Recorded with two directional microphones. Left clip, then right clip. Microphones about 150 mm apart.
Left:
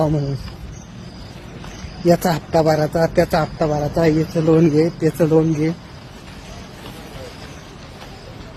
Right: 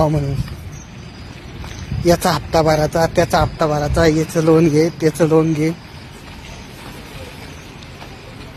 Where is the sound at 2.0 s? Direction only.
15° left (ahead or behind).